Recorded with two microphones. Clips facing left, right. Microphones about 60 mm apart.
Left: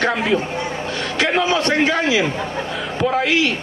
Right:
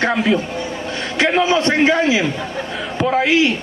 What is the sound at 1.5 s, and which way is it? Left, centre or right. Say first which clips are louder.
Speech: right 3 dB; right.